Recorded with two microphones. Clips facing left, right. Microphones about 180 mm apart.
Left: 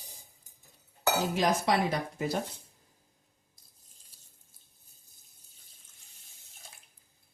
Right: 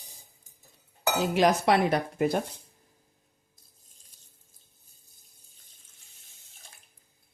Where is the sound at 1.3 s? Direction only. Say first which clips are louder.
Right 8 dB; 65° right (ahead or behind).